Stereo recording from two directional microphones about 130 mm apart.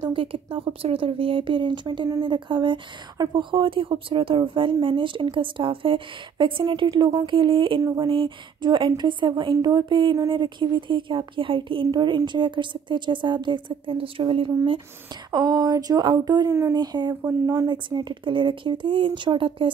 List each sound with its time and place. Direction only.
0.1 s speech: 40° right (ahead or behind)
15.3 s speech: 30° right (ahead or behind)
16.4 s speech: 20° right (ahead or behind)
16.7 s speech: 35° right (ahead or behind)